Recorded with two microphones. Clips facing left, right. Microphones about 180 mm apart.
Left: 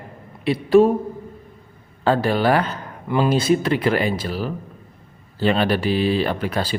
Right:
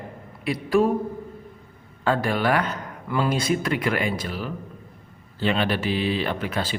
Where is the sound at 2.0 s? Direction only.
30° left (ahead or behind).